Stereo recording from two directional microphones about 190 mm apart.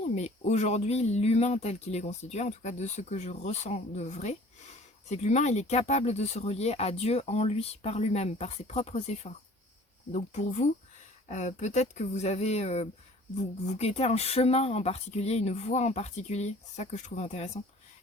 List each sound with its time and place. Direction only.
0.0 s speech: 40° left (ahead or behind)